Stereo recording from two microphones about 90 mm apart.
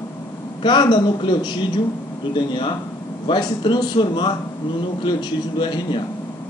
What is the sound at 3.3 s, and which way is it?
A man's voice, 60° left (ahead or behind).